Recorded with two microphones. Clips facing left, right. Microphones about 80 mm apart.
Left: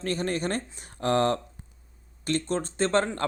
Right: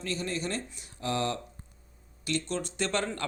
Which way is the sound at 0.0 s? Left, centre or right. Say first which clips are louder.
Left 5 dB; left.